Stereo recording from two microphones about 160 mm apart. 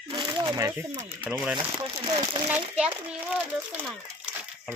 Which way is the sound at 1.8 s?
35° right (ahead or behind).